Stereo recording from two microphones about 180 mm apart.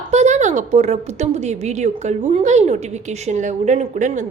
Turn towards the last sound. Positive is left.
turn(degrees=-45)  # may be behind; listen again after turning